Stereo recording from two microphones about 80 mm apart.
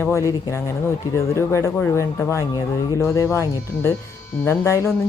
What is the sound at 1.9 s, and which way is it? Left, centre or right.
Speech, left.